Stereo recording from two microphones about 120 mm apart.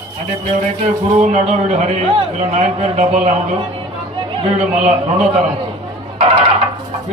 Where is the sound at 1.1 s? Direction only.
70° right (ahead or behind).